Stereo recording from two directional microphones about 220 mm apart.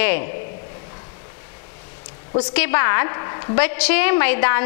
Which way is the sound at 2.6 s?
15° left (ahead or behind).